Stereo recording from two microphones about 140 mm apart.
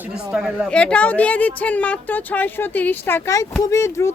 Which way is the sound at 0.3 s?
5° right (ahead or behind).